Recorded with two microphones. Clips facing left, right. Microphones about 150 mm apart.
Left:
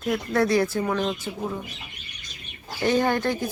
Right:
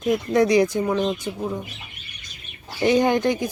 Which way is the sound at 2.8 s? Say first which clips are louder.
Right 4 dB; 15° right (ahead or behind).